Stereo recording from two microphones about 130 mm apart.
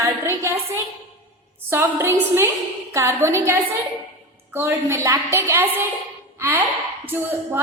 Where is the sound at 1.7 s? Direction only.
20° right (ahead or behind).